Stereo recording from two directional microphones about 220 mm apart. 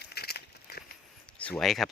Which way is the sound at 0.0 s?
45° left (ahead or behind).